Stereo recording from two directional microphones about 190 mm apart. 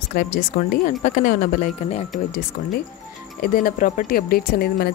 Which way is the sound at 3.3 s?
50° left (ahead or behind).